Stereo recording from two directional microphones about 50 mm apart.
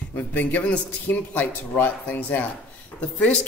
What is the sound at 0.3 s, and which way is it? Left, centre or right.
A man's voice, left.